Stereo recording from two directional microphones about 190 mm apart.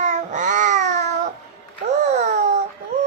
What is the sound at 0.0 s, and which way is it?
Babbling, 40° right (ahead or behind).